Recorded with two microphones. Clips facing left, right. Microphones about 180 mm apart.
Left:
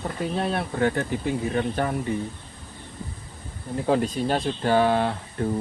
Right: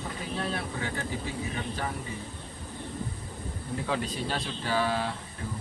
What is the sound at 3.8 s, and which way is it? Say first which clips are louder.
Speech: left 10 dB; 50° left (ahead or behind).